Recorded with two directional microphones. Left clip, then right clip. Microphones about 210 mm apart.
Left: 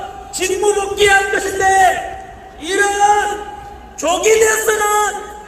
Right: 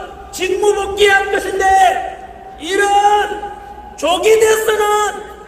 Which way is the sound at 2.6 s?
15° right (ahead or behind).